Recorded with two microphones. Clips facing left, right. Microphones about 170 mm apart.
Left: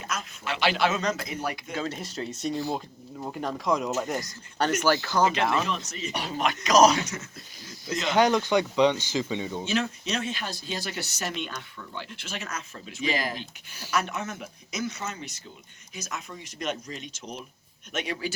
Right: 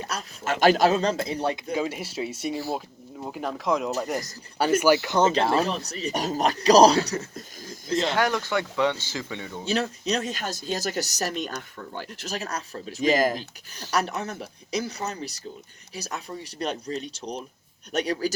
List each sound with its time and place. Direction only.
0.1 s speech: 40° right (ahead or behind)
1.7 s speech: 10° right (ahead or behind)
5.3 s speech: 30° right (ahead or behind)
8.1 s speech: 20° left (ahead or behind)
9.6 s speech: 40° right (ahead or behind)